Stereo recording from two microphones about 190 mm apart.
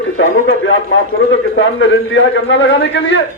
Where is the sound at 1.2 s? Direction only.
90° left; by 3.2 s 65° left (ahead or behind).